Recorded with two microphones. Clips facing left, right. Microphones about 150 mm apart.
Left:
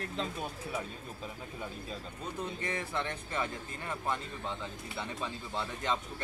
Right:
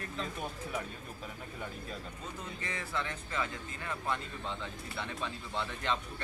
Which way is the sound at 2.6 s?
25° left (ahead or behind).